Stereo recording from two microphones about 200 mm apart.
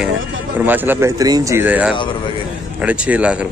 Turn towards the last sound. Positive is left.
turn(degrees=-5)  # may be behind; listen again after turning